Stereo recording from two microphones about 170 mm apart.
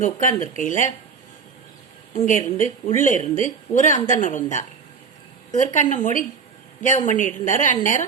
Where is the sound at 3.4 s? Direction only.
50° left (ahead or behind).